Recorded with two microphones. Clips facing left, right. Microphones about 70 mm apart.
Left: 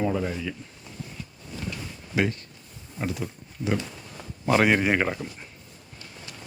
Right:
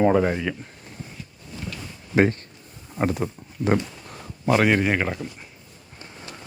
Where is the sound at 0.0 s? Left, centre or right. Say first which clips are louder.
Right 8 dB; right.